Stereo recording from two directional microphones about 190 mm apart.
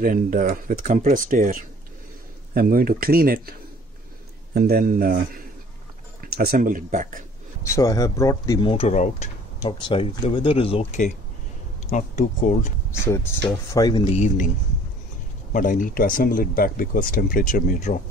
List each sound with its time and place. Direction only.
0.0 s speech: 45° right (ahead or behind)
4.6 s speech: 55° right (ahead or behind)
6.2 s speech: 50° right (ahead or behind)
7.6 s speech: 15° left (ahead or behind); by 9.3 s 40° left (ahead or behind)
9.6 s speech: 25° left (ahead or behind)
11.9 s speech: 40° left (ahead or behind)
13.0 s speech: 15° left (ahead or behind)
14.1 s speech: 40° left (ahead or behind)
15.5 s speech: 45° left (ahead or behind)